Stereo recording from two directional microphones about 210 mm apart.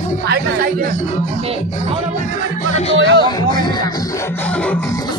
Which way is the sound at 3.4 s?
20° left (ahead or behind).